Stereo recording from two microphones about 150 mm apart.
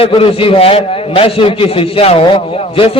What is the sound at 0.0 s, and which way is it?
A man's voice, 40° left (ahead or behind).